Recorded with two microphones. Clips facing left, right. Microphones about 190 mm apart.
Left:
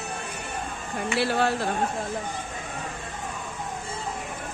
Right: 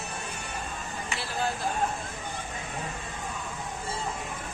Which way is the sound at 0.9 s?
70° left (ahead or behind).